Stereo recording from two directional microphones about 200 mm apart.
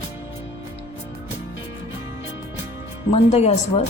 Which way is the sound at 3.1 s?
30° left (ahead or behind).